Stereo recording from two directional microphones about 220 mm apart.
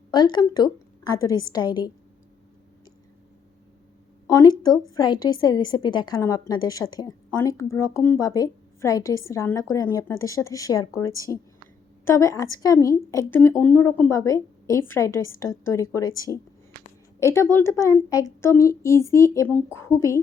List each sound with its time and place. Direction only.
0.1 s a woman's voice: 20° left (ahead or behind)
4.3 s a woman's voice: 15° left (ahead or behind)